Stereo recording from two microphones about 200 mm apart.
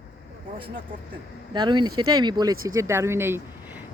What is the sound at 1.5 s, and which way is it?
Speech, 20° right (ahead or behind).